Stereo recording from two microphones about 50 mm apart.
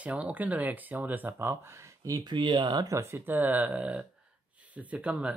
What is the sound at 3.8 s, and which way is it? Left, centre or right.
Speech, right.